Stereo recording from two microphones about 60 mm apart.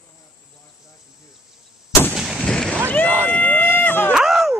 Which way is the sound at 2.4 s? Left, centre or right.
Centre.